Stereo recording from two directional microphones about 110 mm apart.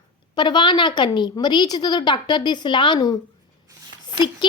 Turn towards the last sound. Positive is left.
turn(degrees=45)  # may be behind; listen again after turning